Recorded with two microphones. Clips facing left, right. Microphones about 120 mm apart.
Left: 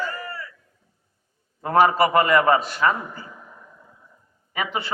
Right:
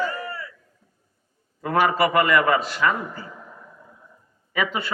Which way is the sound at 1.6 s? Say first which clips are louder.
Left 3 dB; 35° left (ahead or behind).